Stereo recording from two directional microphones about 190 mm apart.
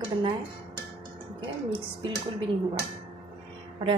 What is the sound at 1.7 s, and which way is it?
Speech, 25° right (ahead or behind).